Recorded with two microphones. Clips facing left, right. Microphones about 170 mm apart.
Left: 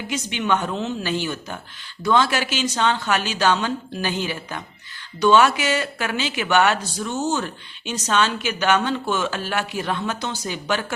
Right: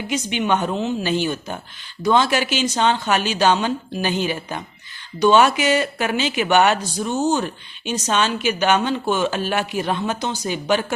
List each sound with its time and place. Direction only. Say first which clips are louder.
0.1 s speech: right 2 dB; 20° right (ahead or behind)